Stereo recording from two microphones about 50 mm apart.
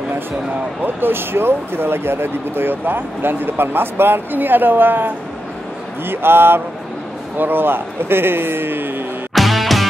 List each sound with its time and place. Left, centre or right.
0.8 s speech: right
9.3 s music: centre